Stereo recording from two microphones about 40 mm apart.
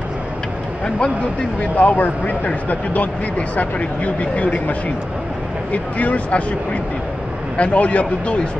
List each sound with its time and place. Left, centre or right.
1.6 s speech: left
5.7 s speech: left
7.5 s speech: left